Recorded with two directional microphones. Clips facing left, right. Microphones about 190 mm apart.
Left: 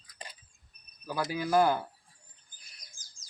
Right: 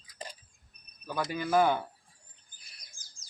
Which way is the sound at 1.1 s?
5° left (ahead or behind).